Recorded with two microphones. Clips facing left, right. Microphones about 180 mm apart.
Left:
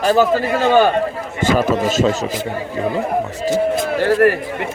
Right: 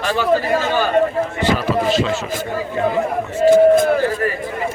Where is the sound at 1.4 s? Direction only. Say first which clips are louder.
Left 4 dB; 45° left (ahead or behind).